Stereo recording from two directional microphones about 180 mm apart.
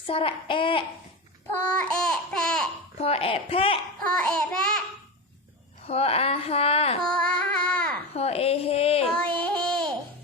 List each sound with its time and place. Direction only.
0.1 s child singing: 30° left (ahead or behind)
1.5 s babbling: 10° left (ahead or behind)
3.0 s speech: 35° left (ahead or behind)
4.0 s babbling: 5° left (ahead or behind)
5.9 s speech: 35° left (ahead or behind)
7.0 s child singing: 5° left (ahead or behind)
8.1 s a sound: 35° left (ahead or behind)
9.1 s child singing: 5° left (ahead or behind)